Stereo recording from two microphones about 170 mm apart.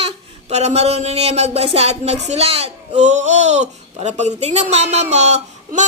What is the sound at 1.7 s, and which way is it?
Speech, 40° right (ahead or behind).